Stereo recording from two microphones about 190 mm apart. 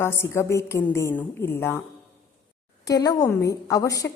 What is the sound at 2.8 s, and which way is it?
A woman's voice, 20° left (ahead or behind).